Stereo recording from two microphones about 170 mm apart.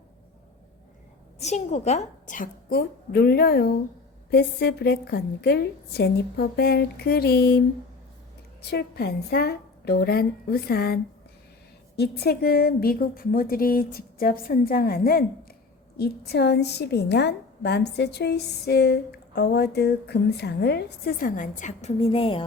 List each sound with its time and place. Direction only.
1.4 s a woman's voice: 40° left (ahead or behind); by 7.6 s 70° left (ahead or behind)
8.6 s a woman's voice: 70° left (ahead or behind); by 22.4 s 30° left (ahead or behind)